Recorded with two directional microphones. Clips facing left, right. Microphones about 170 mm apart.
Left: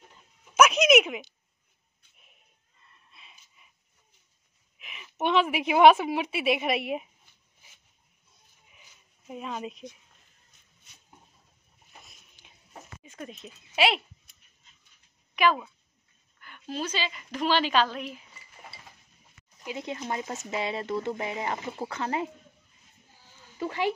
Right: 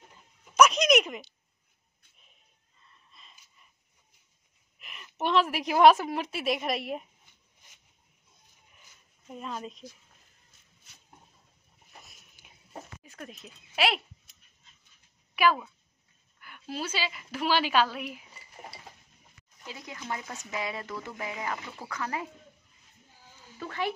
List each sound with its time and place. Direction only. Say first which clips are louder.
0.6 s speech: left 2 dB; 5° left (ahead or behind)
3.1 s a sound: left 2 dB; 5° left (ahead or behind)
4.7 s a woman's voice: left 2 dB; centre (ahead or behind)
9.3 s speech: left 2 dB; 5° left (ahead or behind)
12.0 s a sound: even; centre (ahead or behind)
13.0 s speech: left 3 dB; centre (ahead or behind)
15.3 s speech: left 1 dB; 5° right (ahead or behind)
19.6 s speech: left 8 dB; 20° left (ahead or behind)
23.6 s speech: left 4 dB; 15° left (ahead or behind)